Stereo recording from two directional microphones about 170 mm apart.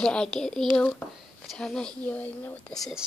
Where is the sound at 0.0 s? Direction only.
5° left (ahead or behind).